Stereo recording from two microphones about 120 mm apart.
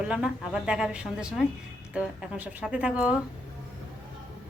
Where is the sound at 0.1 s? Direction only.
5° right (ahead or behind).